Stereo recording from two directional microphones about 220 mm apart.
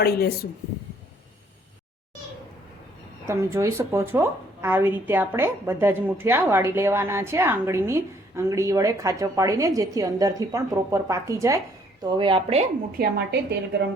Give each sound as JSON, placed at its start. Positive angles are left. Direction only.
{"t": 0.0, "sound": "a woman's voice", "side_deg": 45}
{"t": 3.2, "sound": "a woman's voice", "side_deg": -10}
{"t": 13.0, "sound": "a woman's voice", "side_deg": -45}